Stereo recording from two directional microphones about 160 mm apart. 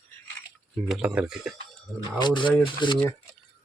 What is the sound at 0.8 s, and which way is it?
Speech, 5° right (ahead or behind).